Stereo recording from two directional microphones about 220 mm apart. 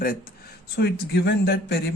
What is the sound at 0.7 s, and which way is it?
Speech, 50° left (ahead or behind).